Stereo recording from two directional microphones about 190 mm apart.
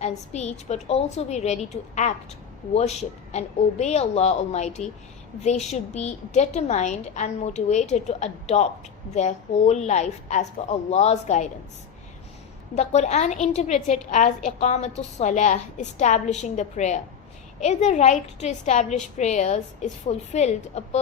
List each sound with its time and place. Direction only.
0.0 s a woman's voice: 35° left (ahead or behind)
12.7 s a woman's voice: 35° left (ahead or behind)